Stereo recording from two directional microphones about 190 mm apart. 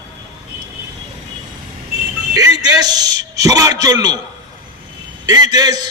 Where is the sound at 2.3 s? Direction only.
20° right (ahead or behind).